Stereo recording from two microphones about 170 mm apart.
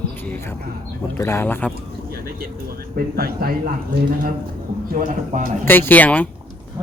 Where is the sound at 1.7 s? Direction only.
60° right (ahead or behind).